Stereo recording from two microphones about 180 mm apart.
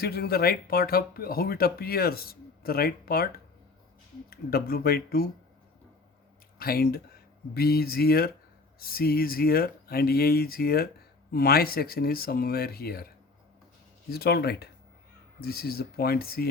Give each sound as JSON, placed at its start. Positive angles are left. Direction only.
{"t": 0.0, "sound": "speech", "side_deg": 60}
{"t": 6.6, "sound": "speech", "side_deg": 55}
{"t": 14.1, "sound": "speech", "side_deg": 60}